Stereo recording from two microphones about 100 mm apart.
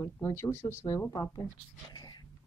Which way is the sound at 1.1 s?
40° left (ahead or behind).